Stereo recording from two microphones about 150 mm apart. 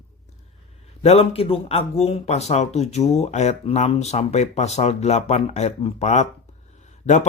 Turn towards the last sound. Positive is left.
turn(degrees=50)  # may be behind; listen again after turning